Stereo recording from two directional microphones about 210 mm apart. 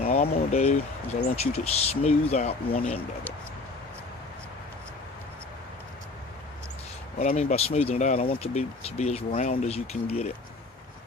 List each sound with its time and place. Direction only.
0.1 s speech: 30° left (ahead or behind)
7.2 s speech: 35° left (ahead or behind)